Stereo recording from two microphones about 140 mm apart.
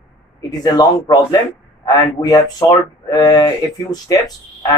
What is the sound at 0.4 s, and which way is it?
Speech, 30° left (ahead or behind).